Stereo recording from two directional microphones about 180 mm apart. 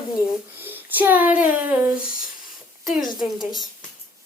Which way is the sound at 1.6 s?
10° right (ahead or behind).